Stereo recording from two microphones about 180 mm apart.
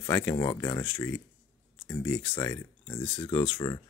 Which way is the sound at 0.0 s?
15° left (ahead or behind).